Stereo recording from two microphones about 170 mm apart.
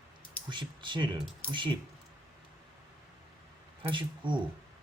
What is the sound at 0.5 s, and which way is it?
Speech, 25° right (ahead or behind).